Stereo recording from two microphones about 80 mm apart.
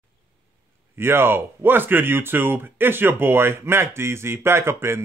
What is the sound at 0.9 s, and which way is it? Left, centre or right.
Speech, right.